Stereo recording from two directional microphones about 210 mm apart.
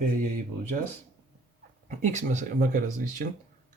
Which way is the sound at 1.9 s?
35° right (ahead or behind).